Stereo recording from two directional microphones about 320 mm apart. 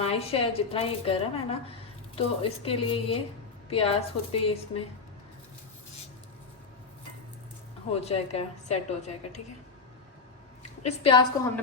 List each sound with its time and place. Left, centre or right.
0.0 s a woman's voice: centre
8.0 s a woman's voice: centre
10.8 s a woman's voice: centre